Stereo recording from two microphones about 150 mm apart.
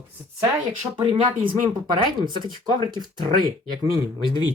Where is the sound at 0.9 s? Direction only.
30° right (ahead or behind).